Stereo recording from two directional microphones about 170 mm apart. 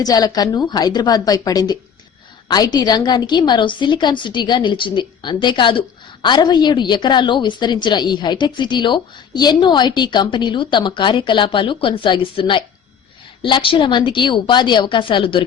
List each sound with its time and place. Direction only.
0.0 s a woman's voice: 20° left (ahead or behind)